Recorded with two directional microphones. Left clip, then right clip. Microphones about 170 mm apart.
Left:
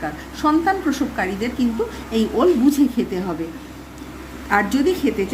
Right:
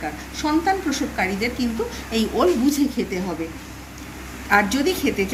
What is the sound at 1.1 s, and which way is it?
A woman's voice, 10° left (ahead or behind).